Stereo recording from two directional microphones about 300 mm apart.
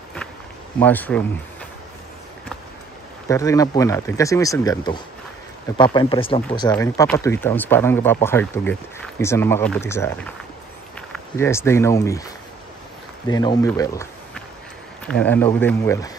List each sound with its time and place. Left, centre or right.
0.7 s speech: centre
3.3 s speech: centre
11.3 s speech: centre
13.3 s speech: centre